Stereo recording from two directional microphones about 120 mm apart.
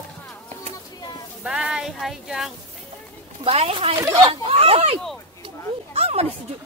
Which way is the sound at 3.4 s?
55° right (ahead or behind).